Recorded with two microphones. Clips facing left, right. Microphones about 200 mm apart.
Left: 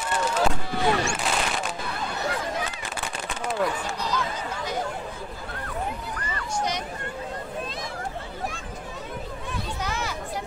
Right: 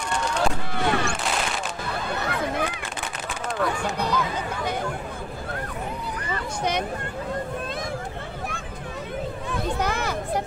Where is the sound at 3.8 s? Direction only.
60° right (ahead or behind).